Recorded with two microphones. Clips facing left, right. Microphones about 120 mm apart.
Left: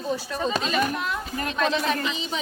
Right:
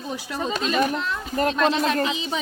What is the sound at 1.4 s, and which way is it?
Speech, 40° right (ahead or behind).